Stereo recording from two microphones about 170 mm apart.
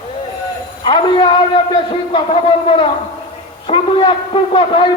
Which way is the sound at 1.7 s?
30° left (ahead or behind).